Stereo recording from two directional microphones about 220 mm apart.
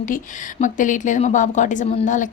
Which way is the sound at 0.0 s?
35° left (ahead or behind).